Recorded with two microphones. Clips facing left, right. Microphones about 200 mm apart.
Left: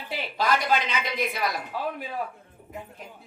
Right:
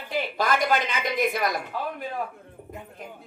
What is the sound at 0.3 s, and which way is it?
A woman's voice, 50° right (ahead or behind).